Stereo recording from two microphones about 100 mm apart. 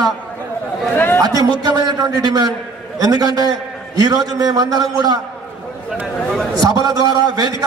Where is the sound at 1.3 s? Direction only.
40° right (ahead or behind).